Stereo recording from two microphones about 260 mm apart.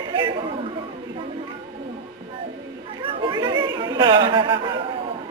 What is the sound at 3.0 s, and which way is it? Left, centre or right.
Chatter, centre.